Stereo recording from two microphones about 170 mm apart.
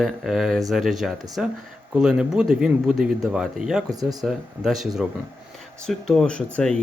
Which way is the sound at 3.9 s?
20° right (ahead or behind).